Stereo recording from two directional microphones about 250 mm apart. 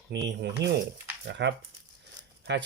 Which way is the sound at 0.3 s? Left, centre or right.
Right.